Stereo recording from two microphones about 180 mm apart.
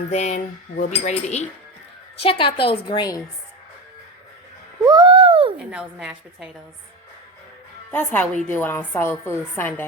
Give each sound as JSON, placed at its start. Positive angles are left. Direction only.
{"t": 0.1, "sound": "cutlery", "side_deg": 40}
{"t": 2.2, "sound": "a woman's voice", "side_deg": 30}
{"t": 4.9, "sound": "a sound", "side_deg": -25}
{"t": 5.5, "sound": "a woman's voice", "side_deg": -5}
{"t": 7.9, "sound": "a woman's voice", "side_deg": 5}